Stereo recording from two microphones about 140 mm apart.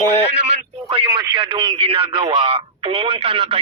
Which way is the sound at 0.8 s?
40° right (ahead or behind).